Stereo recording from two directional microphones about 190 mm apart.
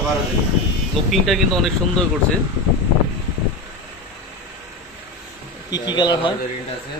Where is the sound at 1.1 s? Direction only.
Centre (ahead or behind).